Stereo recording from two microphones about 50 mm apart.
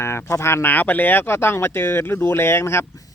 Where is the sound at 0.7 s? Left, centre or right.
Left.